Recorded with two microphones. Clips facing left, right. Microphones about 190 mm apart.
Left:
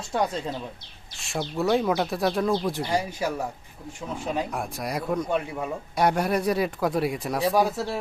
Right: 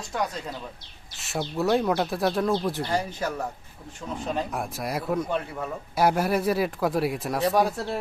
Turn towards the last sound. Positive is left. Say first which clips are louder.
# even
turn(degrees=0)  # may be behind; listen again after turning